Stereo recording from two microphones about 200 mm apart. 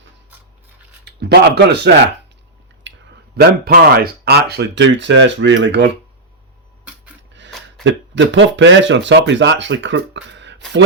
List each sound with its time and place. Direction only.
1.0 s speech: 55° right (ahead or behind)
2.8 s a sound: 65° right (ahead or behind)
3.3 s speech: 50° right (ahead or behind)
7.9 s speech: 65° right (ahead or behind)